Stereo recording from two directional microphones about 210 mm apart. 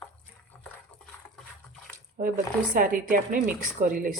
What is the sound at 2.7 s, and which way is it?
Speech, 40° right (ahead or behind).